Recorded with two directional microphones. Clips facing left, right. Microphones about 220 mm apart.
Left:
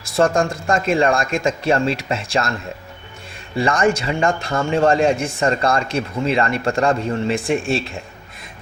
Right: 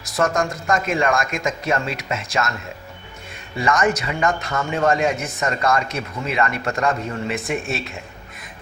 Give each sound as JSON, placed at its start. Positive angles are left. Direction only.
{"t": 0.0, "sound": "speech", "side_deg": 30}
{"t": 3.6, "sound": "a man's voice", "side_deg": 30}